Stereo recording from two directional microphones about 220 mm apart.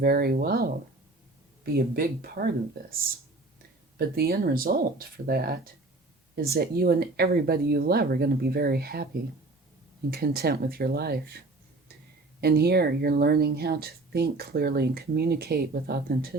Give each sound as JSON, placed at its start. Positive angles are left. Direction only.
{"t": 0.0, "sound": "speech", "side_deg": -45}
{"t": 3.9, "sound": "speech", "side_deg": -45}
{"t": 10.1, "sound": "speech", "side_deg": -45}
{"t": 12.4, "sound": "speech", "side_deg": -45}